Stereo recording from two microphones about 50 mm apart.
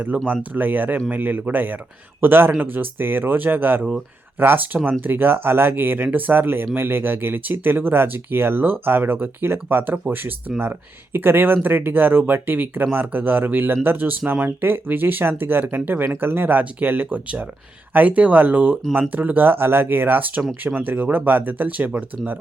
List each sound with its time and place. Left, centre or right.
0.1 s speech: right
0.5 s speech: right
16.0 s speech: right